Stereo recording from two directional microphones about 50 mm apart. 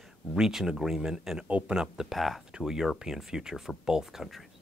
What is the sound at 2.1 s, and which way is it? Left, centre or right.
Speech, centre.